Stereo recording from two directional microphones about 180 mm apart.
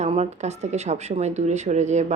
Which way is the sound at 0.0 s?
40° right (ahead or behind).